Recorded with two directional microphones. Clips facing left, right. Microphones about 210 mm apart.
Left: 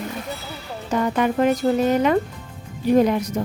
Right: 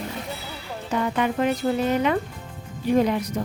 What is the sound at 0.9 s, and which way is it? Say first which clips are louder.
Speech: left 3 dB; 45° left (ahead or behind).